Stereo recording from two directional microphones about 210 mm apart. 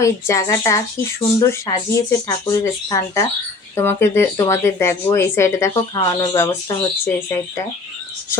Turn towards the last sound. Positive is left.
turn(degrees=15)  # may be behind; listen again after turning